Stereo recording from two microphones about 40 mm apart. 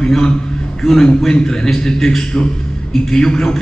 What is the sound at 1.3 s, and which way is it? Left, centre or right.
A man's voice, centre.